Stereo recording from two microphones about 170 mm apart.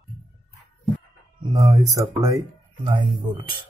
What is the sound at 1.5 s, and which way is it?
Speech, 20° right (ahead or behind).